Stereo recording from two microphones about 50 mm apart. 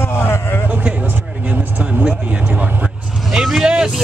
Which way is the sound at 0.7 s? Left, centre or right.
Right.